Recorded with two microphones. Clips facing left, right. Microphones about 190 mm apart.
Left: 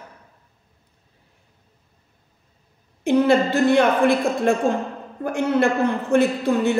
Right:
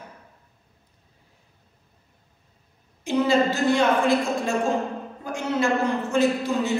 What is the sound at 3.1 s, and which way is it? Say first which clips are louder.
A woman's voice: left 4 dB; 60° left (ahead or behind).